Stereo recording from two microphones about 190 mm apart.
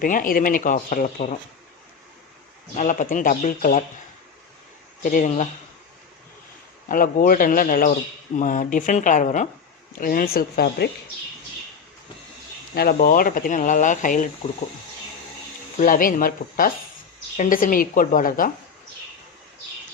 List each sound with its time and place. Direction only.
0.0 s speech: 45° left (ahead or behind)
2.7 s speech: 40° left (ahead or behind)
5.0 s speech: 40° left (ahead or behind)
6.8 s speech: 45° left (ahead or behind)
10.0 s speech: 50° left (ahead or behind)
12.7 s speech: 55° left (ahead or behind)
15.8 s speech: 45° left (ahead or behind)